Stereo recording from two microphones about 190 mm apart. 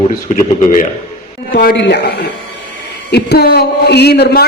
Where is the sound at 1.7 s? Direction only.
65° left (ahead or behind).